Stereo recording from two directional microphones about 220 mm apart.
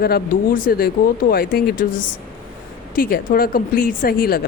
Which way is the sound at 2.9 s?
40° left (ahead or behind).